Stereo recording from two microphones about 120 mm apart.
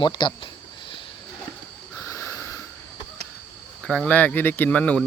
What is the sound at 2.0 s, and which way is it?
Snort, 25° left (ahead or behind).